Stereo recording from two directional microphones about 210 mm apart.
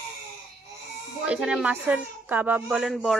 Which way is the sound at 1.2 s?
5° right (ahead or behind).